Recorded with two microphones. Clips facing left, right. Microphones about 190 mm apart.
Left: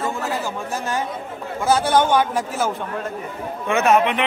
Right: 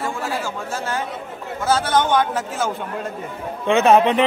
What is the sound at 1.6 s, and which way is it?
Speech, 15° left (ahead or behind).